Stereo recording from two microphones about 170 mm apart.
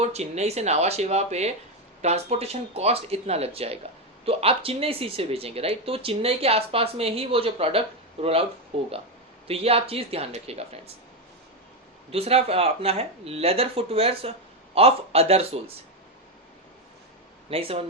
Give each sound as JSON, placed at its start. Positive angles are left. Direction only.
{"t": 0.0, "sound": "speech", "side_deg": -40}
{"t": 12.1, "sound": "speech", "side_deg": -35}
{"t": 17.5, "sound": "speech", "side_deg": -35}